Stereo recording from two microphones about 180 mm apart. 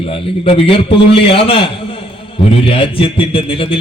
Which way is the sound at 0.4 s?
35° left (ahead or behind).